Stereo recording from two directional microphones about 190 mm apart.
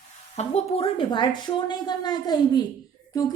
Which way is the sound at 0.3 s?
35° left (ahead or behind).